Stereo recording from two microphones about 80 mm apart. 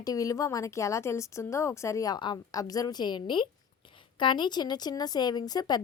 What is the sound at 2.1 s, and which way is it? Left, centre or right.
Speech, left.